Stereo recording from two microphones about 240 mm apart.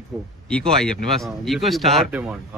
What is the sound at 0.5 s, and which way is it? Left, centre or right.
Speech, centre.